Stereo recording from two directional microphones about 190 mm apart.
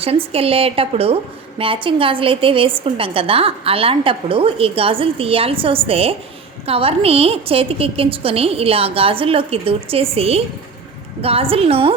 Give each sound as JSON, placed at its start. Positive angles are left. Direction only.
{"t": 0.0, "sound": "a woman's voice", "side_deg": -30}